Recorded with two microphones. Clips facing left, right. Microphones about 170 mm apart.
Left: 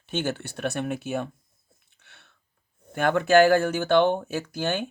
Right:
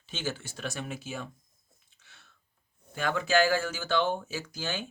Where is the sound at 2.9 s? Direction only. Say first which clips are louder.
Left 8 dB; 60° left (ahead or behind).